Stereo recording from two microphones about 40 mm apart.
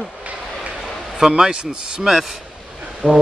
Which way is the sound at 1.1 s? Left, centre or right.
Centre.